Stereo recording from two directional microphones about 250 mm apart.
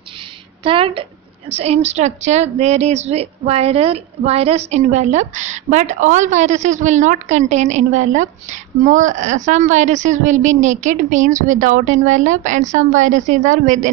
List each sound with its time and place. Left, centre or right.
0.7 s a woman's voice: right